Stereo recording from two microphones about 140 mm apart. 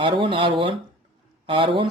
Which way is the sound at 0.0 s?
35° right (ahead or behind).